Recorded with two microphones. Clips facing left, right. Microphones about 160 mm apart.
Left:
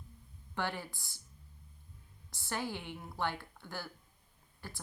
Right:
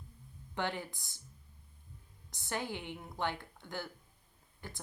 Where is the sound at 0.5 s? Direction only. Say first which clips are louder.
Right 1 dB; 20° right (ahead or behind).